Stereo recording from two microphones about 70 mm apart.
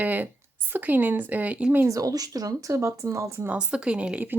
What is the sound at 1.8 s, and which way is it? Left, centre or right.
Speech, right.